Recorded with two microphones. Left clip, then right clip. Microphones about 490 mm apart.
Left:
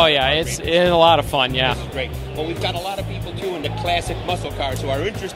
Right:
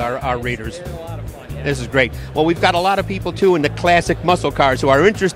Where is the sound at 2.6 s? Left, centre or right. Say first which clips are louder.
Right 10 dB; right.